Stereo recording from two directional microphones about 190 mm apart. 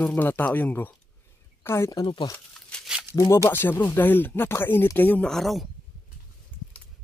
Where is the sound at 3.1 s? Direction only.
15° left (ahead or behind).